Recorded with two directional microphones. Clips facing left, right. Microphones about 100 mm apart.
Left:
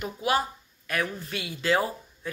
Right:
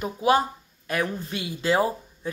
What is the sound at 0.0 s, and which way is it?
Speech, 30° right (ahead or behind).